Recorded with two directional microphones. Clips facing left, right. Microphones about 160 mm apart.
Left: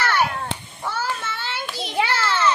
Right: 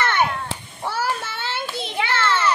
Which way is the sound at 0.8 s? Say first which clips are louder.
Right 2 dB; 30° right (ahead or behind).